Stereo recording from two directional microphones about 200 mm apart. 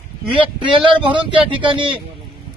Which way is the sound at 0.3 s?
25° right (ahead or behind).